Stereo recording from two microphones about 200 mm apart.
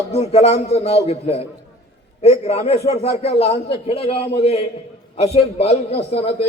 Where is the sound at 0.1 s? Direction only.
30° left (ahead or behind).